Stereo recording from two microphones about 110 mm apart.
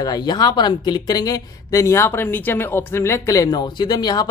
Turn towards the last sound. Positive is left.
turn(degrees=40)  # may be behind; listen again after turning